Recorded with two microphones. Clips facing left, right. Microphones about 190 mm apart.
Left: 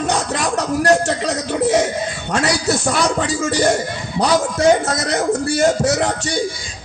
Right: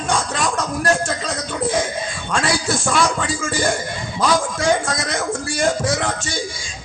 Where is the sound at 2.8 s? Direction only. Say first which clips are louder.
Left 1 dB; 35° left (ahead or behind).